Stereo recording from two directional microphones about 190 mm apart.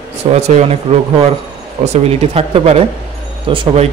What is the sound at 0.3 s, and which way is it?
Speech, 35° right (ahead or behind).